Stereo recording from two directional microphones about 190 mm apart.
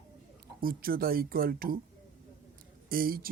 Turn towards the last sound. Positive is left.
turn(degrees=-50)  # may be behind; listen again after turning